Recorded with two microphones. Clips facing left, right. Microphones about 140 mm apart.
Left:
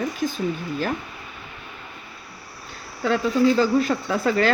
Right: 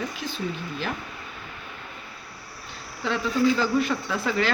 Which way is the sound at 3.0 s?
45° left (ahead or behind).